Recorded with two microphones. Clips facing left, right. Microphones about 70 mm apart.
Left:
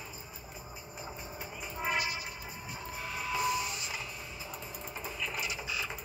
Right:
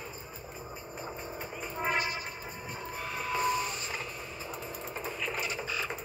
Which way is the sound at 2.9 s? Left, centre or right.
Right.